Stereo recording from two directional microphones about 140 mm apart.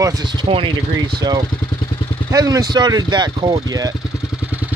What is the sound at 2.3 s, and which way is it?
Speech, 25° right (ahead or behind).